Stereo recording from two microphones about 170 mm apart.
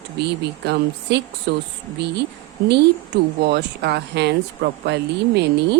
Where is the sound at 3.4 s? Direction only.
80° right.